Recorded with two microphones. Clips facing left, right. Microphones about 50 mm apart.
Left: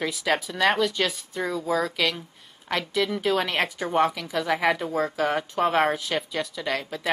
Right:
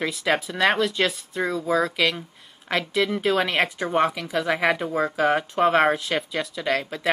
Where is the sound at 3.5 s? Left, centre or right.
Right.